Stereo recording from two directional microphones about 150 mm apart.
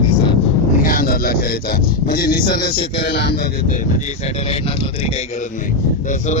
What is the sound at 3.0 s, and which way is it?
Speech, 90° left.